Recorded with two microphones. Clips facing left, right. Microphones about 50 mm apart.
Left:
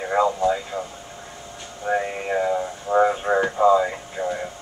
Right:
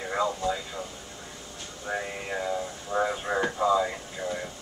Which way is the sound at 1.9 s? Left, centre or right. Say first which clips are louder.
Left 9 dB; left.